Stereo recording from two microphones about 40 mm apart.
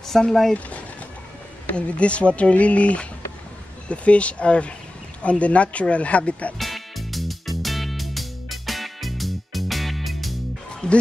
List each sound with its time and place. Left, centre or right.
0.1 s speech: centre
1.8 s speech: left
6.6 s music: centre
10.8 s a sound: left